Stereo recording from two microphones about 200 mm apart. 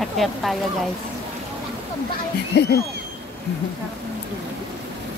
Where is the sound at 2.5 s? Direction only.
55° left (ahead or behind).